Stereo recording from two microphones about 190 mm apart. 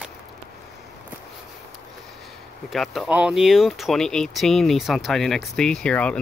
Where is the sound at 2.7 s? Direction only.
Centre (ahead or behind).